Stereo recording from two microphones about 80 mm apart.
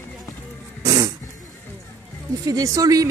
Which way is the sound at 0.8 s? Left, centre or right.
Right.